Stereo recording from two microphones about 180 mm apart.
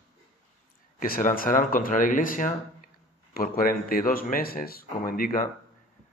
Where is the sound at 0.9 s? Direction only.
50° left (ahead or behind).